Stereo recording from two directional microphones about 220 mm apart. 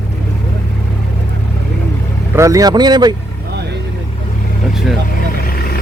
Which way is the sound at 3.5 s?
50° right (ahead or behind).